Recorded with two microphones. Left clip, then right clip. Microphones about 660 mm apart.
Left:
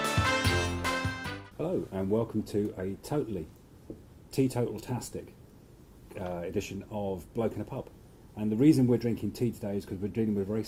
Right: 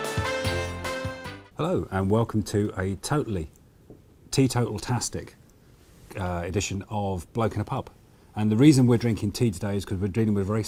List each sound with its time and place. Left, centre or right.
0.0 s music: centre
1.5 s speech: right